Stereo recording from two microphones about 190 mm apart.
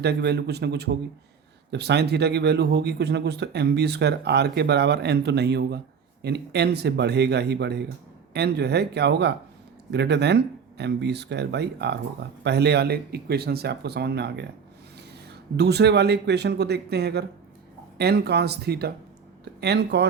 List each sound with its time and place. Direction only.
0.0 s speech: 60° right (ahead or behind)
15.5 s speech: 60° right (ahead or behind)